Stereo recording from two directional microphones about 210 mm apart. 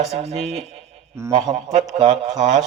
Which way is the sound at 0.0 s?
30° right (ahead or behind).